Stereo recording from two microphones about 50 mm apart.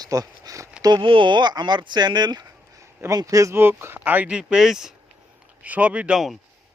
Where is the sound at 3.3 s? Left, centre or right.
Right.